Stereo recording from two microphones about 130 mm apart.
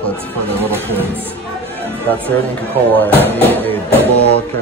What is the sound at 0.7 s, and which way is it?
Speech, 15° right (ahead or behind).